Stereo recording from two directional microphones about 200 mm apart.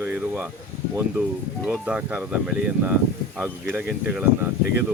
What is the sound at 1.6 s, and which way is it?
Speech, 5° right (ahead or behind).